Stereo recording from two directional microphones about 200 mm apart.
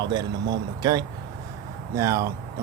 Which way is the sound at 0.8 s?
20° right (ahead or behind).